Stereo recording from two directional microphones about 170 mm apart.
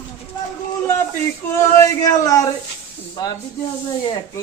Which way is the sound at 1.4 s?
15° left (ahead or behind).